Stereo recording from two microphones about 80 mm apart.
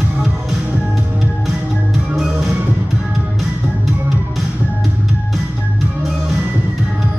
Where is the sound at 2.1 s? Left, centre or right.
Centre.